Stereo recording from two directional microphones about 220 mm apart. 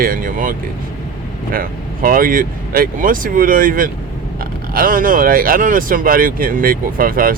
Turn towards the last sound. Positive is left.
turn(degrees=-40)  # may be behind; listen again after turning